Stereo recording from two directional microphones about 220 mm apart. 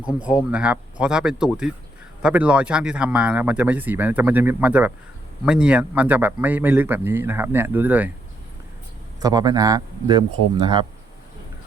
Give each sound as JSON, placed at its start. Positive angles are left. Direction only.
{"t": 0.2, "sound": "speech", "side_deg": -5}
{"t": 9.2, "sound": "speech", "side_deg": -15}